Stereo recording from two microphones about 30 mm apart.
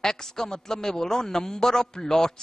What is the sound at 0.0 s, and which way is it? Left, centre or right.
A man's voice, centre.